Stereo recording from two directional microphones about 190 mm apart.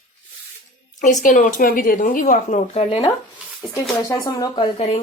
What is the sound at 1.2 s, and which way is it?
A woman's voice, 45° left (ahead or behind).